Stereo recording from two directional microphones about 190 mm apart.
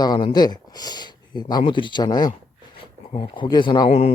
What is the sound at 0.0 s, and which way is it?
Speech, 20° left (ahead or behind).